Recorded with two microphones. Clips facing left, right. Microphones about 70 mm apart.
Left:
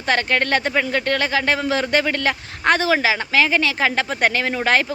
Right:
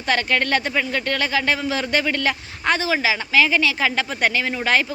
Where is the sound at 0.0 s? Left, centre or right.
Left.